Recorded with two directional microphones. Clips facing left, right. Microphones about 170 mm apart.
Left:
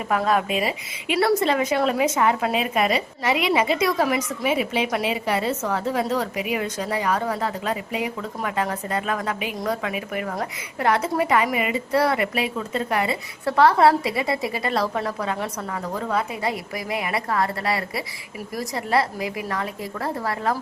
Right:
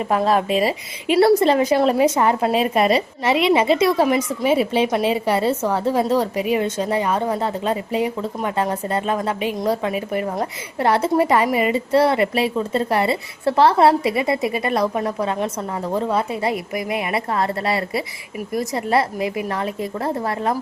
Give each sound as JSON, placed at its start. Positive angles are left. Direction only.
{"t": 0.1, "sound": "a woman's voice", "side_deg": -30}